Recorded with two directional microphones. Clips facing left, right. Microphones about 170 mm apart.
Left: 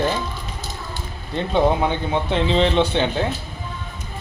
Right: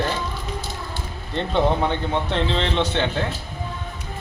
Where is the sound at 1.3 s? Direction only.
10° left (ahead or behind).